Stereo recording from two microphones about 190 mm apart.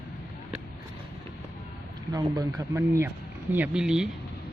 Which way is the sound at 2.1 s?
20° right (ahead or behind).